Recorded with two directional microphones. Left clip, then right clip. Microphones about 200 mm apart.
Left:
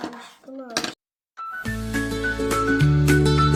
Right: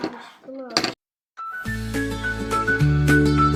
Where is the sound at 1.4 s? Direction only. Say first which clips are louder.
Right 1 dB; centre (ahead or behind).